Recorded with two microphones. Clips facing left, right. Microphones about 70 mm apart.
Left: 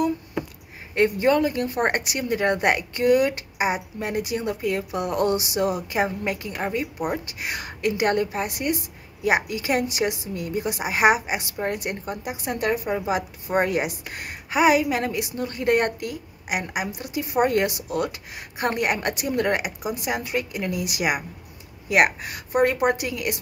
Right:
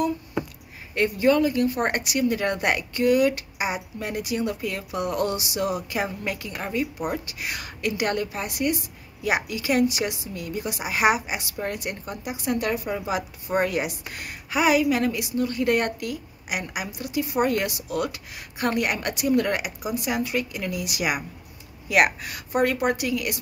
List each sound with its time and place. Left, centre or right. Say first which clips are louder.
0.9 s a woman's voice: left 1 dB; left